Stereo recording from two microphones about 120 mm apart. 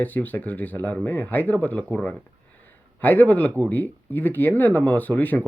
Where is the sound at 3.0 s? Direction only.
15° left (ahead or behind).